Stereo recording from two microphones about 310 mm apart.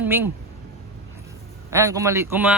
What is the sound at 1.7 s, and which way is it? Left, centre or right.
Speech, centre.